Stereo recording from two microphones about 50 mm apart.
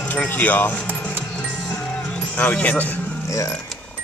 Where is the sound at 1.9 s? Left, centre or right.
Centre.